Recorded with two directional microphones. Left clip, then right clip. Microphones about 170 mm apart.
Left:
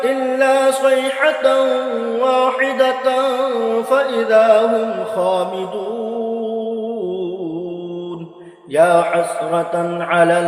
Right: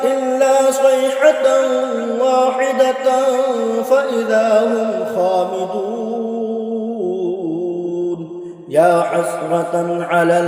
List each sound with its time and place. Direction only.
0.0 s music: 45° right (ahead or behind)
2.1 s mantra: 45° right (ahead or behind)
8.7 s mantra: 45° right (ahead or behind)